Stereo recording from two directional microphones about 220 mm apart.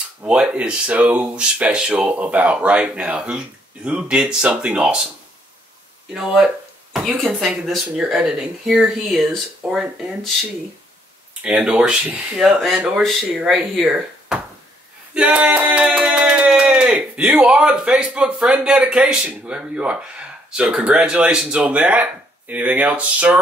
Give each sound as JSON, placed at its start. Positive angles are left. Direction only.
{"t": 0.2, "sound": "speech", "side_deg": -5}
{"t": 6.1, "sound": "speech", "side_deg": 0}
{"t": 11.4, "sound": "speech", "side_deg": -5}
{"t": 15.1, "sound": "a sound", "side_deg": -5}